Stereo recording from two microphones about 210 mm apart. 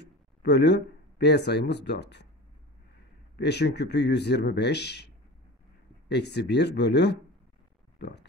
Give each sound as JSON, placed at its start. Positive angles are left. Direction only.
{"t": 0.4, "sound": "speech", "side_deg": 55}
{"t": 3.3, "sound": "speech", "side_deg": 55}
{"t": 6.0, "sound": "speech", "side_deg": 55}
{"t": 8.0, "sound": "a sound", "side_deg": 55}